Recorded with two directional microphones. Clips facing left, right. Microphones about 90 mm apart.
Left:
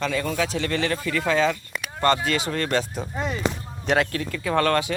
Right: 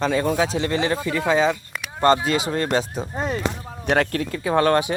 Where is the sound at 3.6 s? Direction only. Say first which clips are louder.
Right 2 dB; 70° right (ahead or behind).